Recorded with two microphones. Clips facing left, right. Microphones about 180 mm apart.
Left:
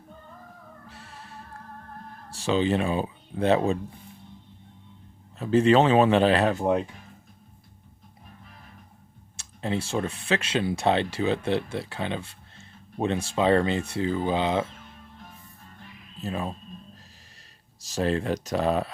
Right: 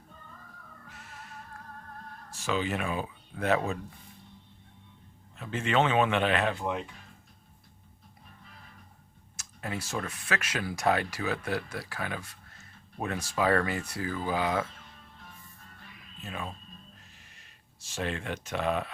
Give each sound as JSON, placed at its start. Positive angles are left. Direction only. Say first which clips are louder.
{"t": 0.9, "sound": "music", "louder": "even", "side_deg": 30}
{"t": 2.3, "sound": "speech", "louder": "left 7 dB", "side_deg": 30}
{"t": 5.4, "sound": "speech", "louder": "left 9 dB", "side_deg": 35}
{"t": 9.4, "sound": "speech", "louder": "left 8 dB", "side_deg": 30}
{"t": 16.2, "sound": "speech", "louder": "left 8 dB", "side_deg": 35}
{"t": 17.7, "sound": "speech", "louder": "left 8 dB", "side_deg": 40}